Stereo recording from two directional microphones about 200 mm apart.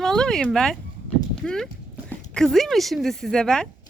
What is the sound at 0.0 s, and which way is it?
A woman's voice, 5° left (ahead or behind).